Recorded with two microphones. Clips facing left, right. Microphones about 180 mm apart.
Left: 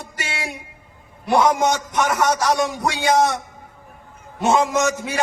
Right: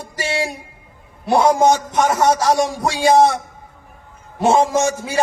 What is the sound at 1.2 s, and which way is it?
A man's voice, 30° right (ahead or behind).